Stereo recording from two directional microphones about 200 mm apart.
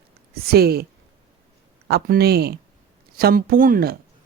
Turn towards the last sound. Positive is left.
turn(degrees=-45)  # may be behind; listen again after turning